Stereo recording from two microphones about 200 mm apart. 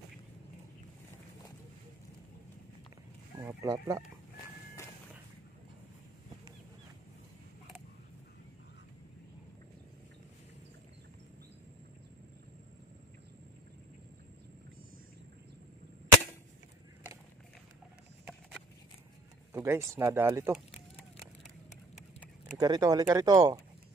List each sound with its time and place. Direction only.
3.3 s speech: 15° right (ahead or behind)
19.5 s speech: 10° right (ahead or behind)
22.6 s speech: 15° right (ahead or behind)